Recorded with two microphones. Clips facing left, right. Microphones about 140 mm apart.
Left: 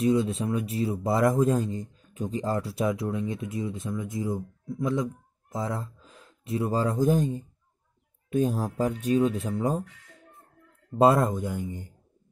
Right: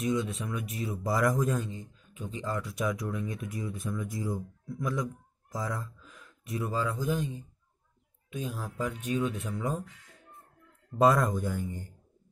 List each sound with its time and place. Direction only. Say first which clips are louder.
0.0 s speech: left 6 dB; 30° left (ahead or behind)
11.0 s speech: left 3 dB; 30° left (ahead or behind)